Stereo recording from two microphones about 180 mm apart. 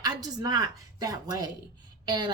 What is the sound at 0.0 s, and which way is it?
A woman's voice, 20° right (ahead or behind).